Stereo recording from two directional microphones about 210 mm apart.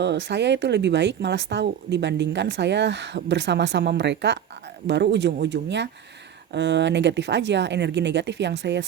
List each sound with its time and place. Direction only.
0.0 s speech: 55° right (ahead or behind)